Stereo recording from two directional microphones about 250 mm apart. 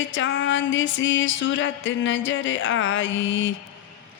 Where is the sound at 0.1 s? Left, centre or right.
Left.